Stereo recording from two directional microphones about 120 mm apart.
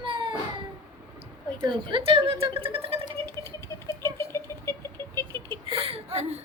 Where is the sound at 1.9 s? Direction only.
45° right (ahead or behind).